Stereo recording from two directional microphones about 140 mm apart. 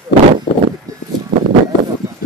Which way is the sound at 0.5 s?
40° left (ahead or behind).